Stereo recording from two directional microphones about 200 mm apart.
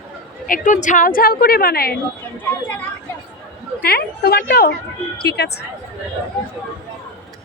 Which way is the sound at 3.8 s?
50° left (ahead or behind).